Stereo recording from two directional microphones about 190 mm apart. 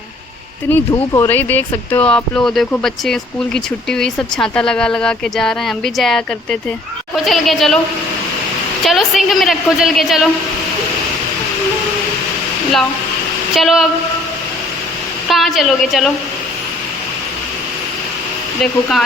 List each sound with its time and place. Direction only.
0.7 s speech: 15° left (ahead or behind)
8.8 s speech: centre (ahead or behind)
13.6 s speech: centre (ahead or behind)
15.3 s speech: centre (ahead or behind)
18.6 s speech: centre (ahead or behind)